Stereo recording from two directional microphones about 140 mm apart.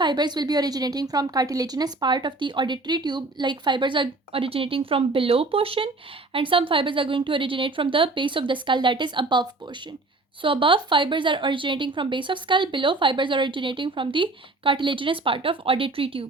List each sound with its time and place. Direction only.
0.0 s a woman's voice: 30° right (ahead or behind)